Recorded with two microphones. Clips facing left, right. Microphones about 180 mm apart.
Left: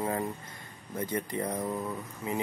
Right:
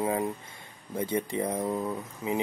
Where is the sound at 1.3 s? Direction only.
15° right (ahead or behind).